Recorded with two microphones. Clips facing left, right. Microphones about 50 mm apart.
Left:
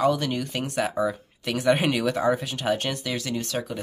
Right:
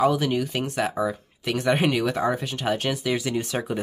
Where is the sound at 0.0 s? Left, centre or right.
Centre.